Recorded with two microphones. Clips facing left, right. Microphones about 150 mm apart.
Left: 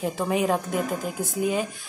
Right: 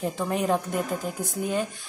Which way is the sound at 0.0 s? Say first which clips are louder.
Left 2 dB; 5° left (ahead or behind).